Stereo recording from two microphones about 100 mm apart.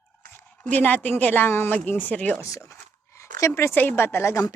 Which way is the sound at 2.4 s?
30° left (ahead or behind).